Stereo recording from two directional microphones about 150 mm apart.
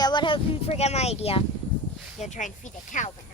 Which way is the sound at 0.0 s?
30° left (ahead or behind).